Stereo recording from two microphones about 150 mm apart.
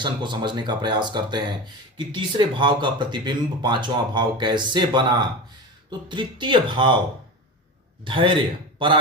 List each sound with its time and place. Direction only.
0.0 s speech: 30° right (ahead or behind)
8.0 s speech: 35° right (ahead or behind)